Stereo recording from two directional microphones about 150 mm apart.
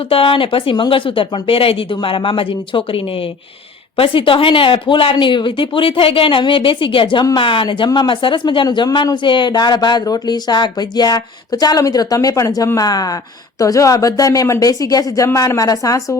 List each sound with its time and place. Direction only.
0.1 s speech: 35° left (ahead or behind)